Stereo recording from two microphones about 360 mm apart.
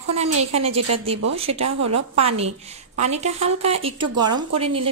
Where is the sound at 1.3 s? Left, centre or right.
Centre.